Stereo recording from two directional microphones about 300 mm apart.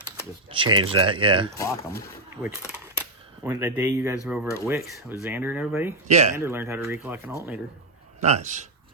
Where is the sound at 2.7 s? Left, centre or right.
Centre.